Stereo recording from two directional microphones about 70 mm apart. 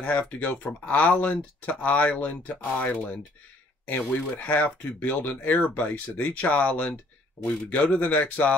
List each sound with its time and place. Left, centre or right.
0.0 s speech: left
4.4 s speech: left